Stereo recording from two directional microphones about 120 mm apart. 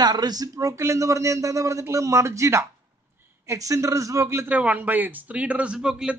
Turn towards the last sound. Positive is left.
turn(degrees=-5)  # may be behind; listen again after turning